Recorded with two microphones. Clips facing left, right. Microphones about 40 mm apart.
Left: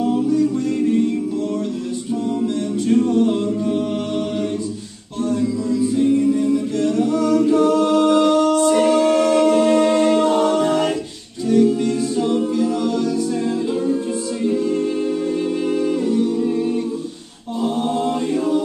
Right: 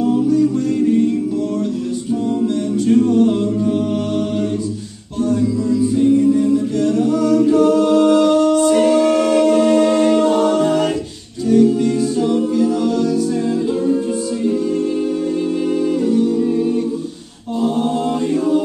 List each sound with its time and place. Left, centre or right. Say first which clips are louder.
0.0 s music: right 3 dB; centre
2.9 s a capella: right 3 dB; centre
5.3 s music: right 3 dB; centre
6.5 s a capella: right 3 dB; centre
15.7 s humming: right 3 dB; centre
17.6 s chant: right 3 dB; centre